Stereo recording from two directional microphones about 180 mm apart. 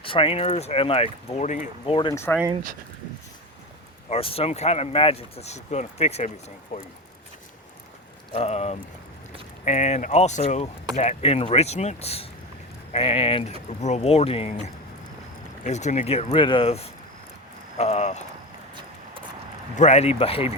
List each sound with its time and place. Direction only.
0.0 s speech: 30° left (ahead or behind)
2.0 s speech: 25° left (ahead or behind)
4.1 s speech: 30° left (ahead or behind)
6.7 s speech: 50° left (ahead or behind)
8.3 s speech: 35° left (ahead or behind)
19.7 s speech: 40° left (ahead or behind)